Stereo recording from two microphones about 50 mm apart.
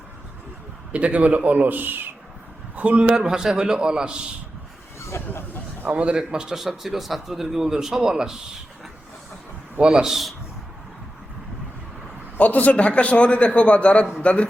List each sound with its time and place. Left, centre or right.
0.9 s a man's voice: right
2.7 s a man's voice: right
4.9 s a sound: left
5.8 s a man's voice: right
6.1 s a man's voice: centre
6.6 s a man's voice: centre
9.8 s a man's voice: centre
10.1 s a man's voice: centre
12.4 s a man's voice: left